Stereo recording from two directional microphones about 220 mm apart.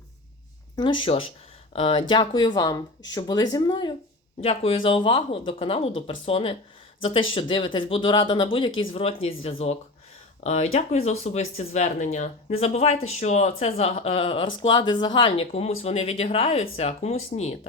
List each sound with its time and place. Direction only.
0.8 s speech: 20° left (ahead or behind)